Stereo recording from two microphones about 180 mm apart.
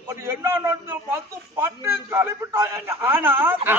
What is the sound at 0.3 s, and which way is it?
A man's voice, 15° right (ahead or behind).